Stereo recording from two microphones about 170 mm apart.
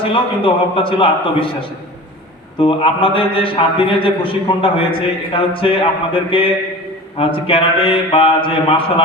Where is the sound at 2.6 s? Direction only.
30° left (ahead or behind).